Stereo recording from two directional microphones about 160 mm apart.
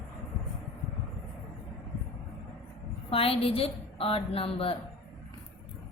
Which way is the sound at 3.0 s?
35° left (ahead or behind).